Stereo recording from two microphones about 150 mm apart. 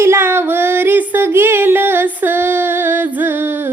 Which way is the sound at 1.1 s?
15° right (ahead or behind).